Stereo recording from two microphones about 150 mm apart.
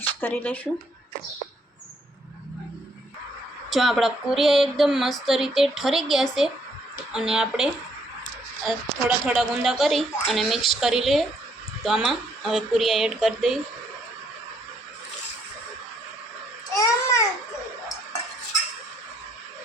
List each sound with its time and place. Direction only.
0.2 s speech: 15° left (ahead or behind)
3.7 s speech: centre (ahead or behind)
16.7 s babbling: 20° left (ahead or behind)